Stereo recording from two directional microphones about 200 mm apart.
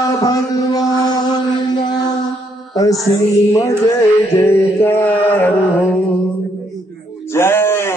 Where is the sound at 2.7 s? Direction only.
20° left (ahead or behind).